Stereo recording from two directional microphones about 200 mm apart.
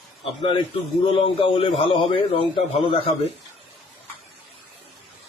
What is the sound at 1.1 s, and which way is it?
A man's voice, 25° left (ahead or behind).